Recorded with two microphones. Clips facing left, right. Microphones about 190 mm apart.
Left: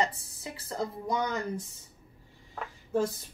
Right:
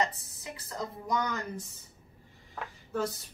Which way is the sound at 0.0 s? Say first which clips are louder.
Left 1 dB; 30° left (ahead or behind).